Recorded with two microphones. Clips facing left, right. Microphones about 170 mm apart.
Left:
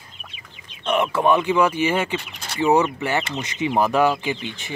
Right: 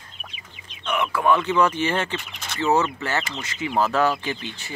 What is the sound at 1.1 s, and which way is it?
Speech, 20° left (ahead or behind).